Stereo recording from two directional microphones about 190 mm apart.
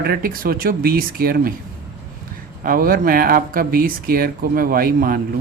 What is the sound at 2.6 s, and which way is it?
Speech, 50° right (ahead or behind).